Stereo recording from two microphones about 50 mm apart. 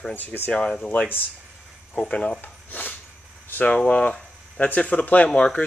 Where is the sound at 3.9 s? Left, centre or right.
Left.